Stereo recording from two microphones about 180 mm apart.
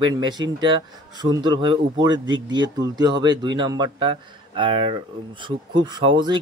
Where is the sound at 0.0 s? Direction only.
25° right (ahead or behind).